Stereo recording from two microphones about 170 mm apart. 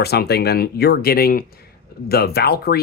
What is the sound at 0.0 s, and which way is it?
Speech, 70° left (ahead or behind).